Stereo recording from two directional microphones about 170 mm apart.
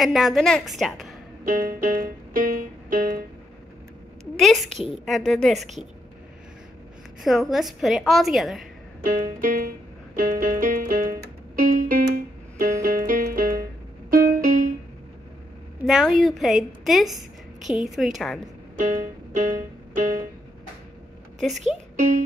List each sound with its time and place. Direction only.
0.0 s a woman's voice: centre (ahead or behind)
1.4 s music: 55° right (ahead or behind)
4.4 s a woman's voice: centre (ahead or behind)
7.2 s a woman's voice: centre (ahead or behind)
9.0 s music: 50° right (ahead or behind)
15.9 s a woman's voice: centre (ahead or behind)
18.8 s music: 50° right (ahead or behind)
21.4 s a woman's voice: centre (ahead or behind)
21.9 s speech: 50° right (ahead or behind)